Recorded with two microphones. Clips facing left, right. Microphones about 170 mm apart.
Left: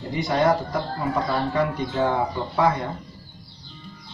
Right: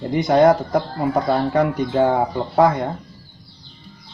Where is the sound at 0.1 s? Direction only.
50° right (ahead or behind).